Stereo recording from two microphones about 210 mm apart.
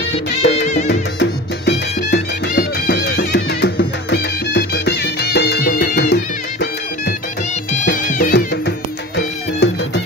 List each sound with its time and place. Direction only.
0.4 s music: 55° left (ahead or behind)
7.8 s music: 40° left (ahead or behind)